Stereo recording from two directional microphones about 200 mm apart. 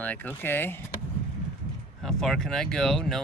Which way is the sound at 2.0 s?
Centre (ahead or behind).